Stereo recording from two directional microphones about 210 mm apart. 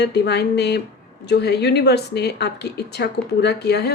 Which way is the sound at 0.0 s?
50° left (ahead or behind).